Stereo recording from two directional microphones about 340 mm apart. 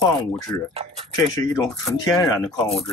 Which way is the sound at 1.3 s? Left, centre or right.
Centre.